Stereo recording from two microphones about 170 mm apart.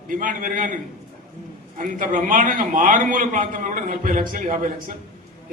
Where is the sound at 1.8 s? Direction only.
50° right (ahead or behind).